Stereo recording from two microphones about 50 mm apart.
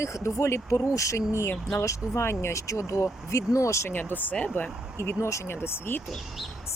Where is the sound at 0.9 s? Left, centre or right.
Left.